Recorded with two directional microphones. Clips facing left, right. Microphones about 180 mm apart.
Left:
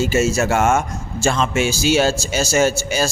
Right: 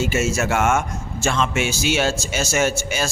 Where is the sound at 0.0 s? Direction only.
35° left (ahead or behind).